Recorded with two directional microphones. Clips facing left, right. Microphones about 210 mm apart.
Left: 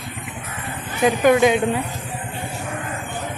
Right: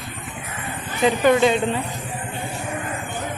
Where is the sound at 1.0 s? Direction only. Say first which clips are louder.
Left 1 dB; 10° left (ahead or behind).